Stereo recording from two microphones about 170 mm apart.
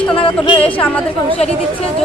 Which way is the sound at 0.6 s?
5° left (ahead or behind).